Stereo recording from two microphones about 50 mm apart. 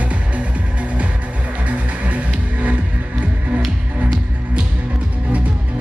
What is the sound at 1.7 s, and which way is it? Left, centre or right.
Music, right.